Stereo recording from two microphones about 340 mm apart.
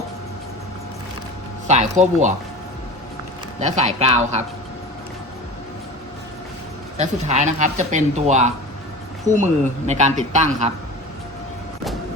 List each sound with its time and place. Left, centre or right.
1.6 s speech: centre
3.6 s speech: centre
6.9 s speech: centre